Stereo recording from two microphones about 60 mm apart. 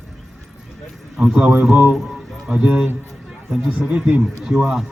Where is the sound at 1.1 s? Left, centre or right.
Centre.